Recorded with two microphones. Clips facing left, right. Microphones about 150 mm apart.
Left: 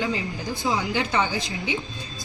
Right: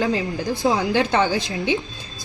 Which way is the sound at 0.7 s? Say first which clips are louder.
Right 6 dB; 70° right (ahead or behind).